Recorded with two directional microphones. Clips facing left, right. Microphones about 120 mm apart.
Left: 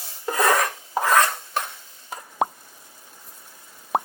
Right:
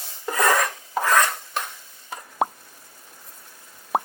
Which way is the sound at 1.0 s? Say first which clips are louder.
Left 1 dB; 10° left (ahead or behind).